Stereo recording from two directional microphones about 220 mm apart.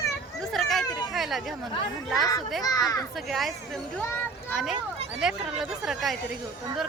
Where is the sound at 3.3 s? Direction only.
Centre (ahead or behind).